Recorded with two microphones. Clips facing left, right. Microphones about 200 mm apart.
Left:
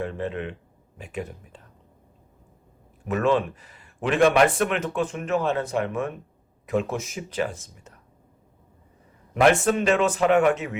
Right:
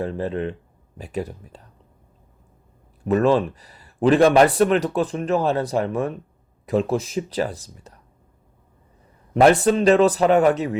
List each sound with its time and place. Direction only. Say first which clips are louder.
0.0 s speech: right 4 dB; 35° right (ahead or behind)
3.1 s speech: right 4 dB; 35° right (ahead or behind)
9.3 s speech: right 4 dB; 35° right (ahead or behind)